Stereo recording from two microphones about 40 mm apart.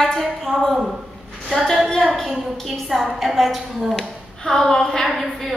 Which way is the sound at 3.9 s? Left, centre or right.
Centre.